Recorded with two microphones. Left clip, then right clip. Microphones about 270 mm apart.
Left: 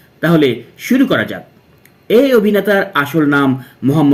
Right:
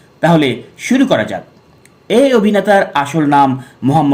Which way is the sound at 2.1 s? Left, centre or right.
Centre.